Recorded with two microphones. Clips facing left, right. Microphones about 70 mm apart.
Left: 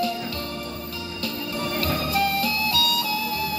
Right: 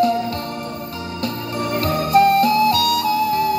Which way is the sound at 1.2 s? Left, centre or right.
Right.